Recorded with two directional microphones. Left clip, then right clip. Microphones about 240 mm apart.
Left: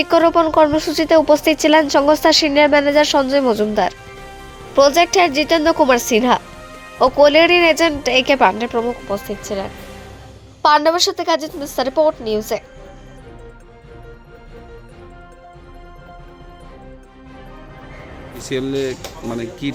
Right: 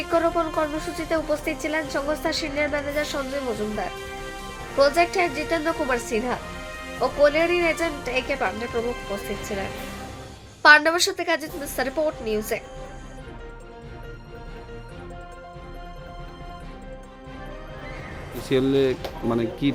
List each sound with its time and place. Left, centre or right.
0.1 s a woman's voice: left; by 12.6 s centre
18.4 s speech: centre